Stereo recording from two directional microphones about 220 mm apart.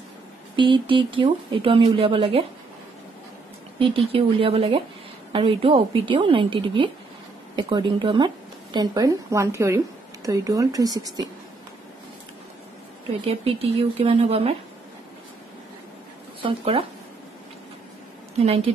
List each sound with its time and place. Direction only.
0.6 s speech: 20° right (ahead or behind)
3.8 s a woman's voice: 25° right (ahead or behind)
13.3 s speech: 25° right (ahead or behind)
16.4 s speech: 25° right (ahead or behind)